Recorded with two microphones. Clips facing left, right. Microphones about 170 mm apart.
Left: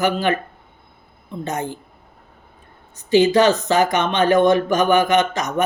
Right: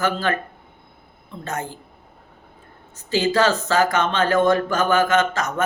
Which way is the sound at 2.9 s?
20° left (ahead or behind).